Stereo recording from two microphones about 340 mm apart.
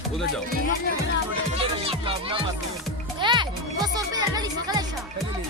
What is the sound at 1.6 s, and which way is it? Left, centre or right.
Music, centre.